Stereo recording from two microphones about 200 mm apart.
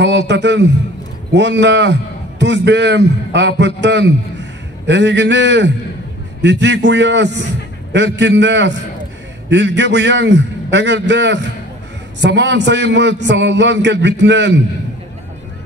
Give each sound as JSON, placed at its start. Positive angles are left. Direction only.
{"t": 0.0, "sound": "a man's voice", "side_deg": -60}